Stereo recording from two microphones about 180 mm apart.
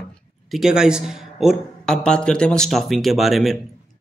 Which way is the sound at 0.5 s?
Centre (ahead or behind).